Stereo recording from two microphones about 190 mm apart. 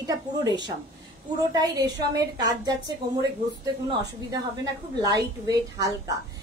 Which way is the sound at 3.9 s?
20° right (ahead or behind).